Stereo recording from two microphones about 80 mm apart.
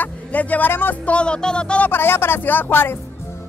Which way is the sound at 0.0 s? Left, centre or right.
Centre.